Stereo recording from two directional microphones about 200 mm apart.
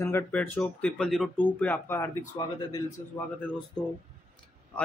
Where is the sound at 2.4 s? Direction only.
20° left (ahead or behind).